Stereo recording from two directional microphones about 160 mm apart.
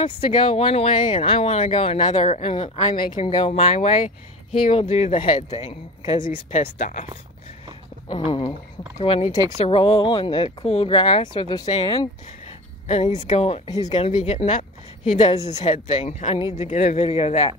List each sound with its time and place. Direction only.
0.0 s speech: 30° left (ahead or behind)
2.1 s speech: 45° left (ahead or behind)
3.0 s speech: 30° left (ahead or behind); by 7.1 s 45° left (ahead or behind)
8.1 s speech: 30° left (ahead or behind)
8.9 s speech: 40° left (ahead or behind)
11.7 s speech: 40° left (ahead or behind)
12.4 s a sound: 45° left (ahead or behind)
13.0 s speech: 40° left (ahead or behind)
13.7 s speech: 25° left (ahead or behind)
13.9 s a woman's voice: 35° left (ahead or behind)
16.3 s speech: 35° left (ahead or behind)